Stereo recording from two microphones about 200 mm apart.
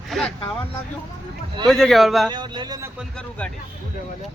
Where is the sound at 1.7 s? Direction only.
Centre (ahead or behind).